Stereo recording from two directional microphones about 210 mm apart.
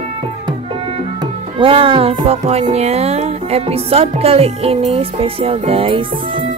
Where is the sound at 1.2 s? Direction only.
25° right (ahead or behind).